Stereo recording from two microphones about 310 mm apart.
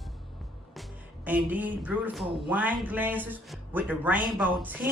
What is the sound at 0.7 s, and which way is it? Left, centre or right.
Speech, centre.